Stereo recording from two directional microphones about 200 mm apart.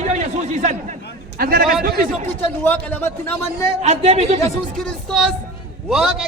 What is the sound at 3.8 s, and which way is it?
Speech, 35° right (ahead or behind).